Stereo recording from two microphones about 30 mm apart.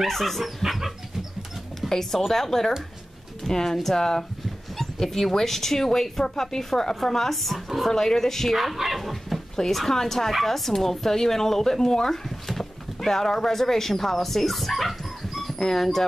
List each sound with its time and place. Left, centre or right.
0.0 s speech: centre
0.6 s dog: centre
1.8 s speech: centre
7.9 s speech: centre
8.5 s speech: centre
15.6 s speech: centre